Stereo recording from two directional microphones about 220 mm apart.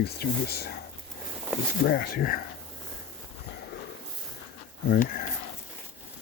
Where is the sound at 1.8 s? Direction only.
45° left (ahead or behind).